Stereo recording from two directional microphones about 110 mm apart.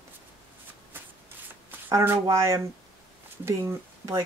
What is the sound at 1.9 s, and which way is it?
Speech, 30° right (ahead or behind).